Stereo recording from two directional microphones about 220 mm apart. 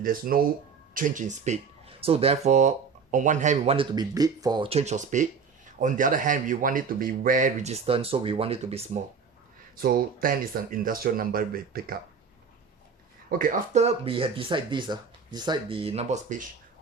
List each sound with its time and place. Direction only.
0.0 s speech: 40° right (ahead or behind)
9.8 s speech: 40° right (ahead or behind)
13.4 s speech: 35° right (ahead or behind)